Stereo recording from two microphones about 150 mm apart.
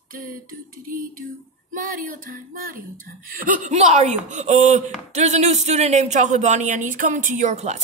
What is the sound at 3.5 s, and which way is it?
Speech, 55° right (ahead or behind).